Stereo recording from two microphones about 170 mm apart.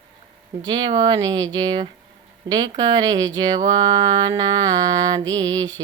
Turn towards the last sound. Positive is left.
turn(degrees=-25)  # may be behind; listen again after turning